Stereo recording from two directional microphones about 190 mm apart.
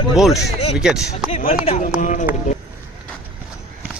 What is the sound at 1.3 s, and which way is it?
Speech, 35° left (ahead or behind).